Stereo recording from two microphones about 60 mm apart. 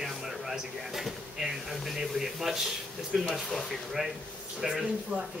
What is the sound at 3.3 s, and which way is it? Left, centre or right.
Speech, centre.